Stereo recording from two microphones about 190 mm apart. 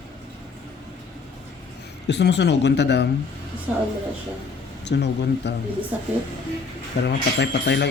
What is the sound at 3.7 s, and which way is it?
Speech, 5° right (ahead or behind).